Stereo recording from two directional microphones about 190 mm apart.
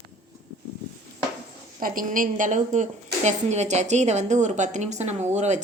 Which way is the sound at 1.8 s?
45° right (ahead or behind).